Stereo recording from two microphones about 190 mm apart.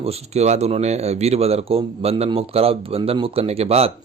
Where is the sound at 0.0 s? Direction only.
30° right (ahead or behind).